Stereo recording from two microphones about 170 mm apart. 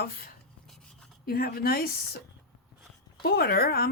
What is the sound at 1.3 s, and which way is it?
Speech, 65° left (ahead or behind).